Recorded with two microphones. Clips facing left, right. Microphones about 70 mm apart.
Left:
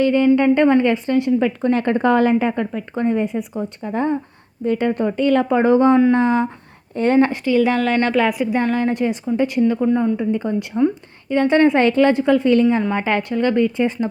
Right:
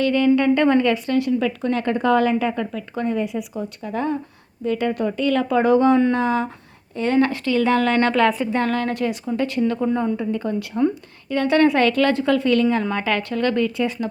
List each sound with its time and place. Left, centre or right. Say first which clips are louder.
0.0 s a woman's voice: left 3 dB; left
1.4 s a woman's voice: left 4 dB; left
6.9 s a woman's voice: left 4 dB; left
7.2 s a woman's voice: left 2 dB; left
9.7 s a woman's voice: left 4 dB; centre
10.2 s a woman's voice: left 3 dB; left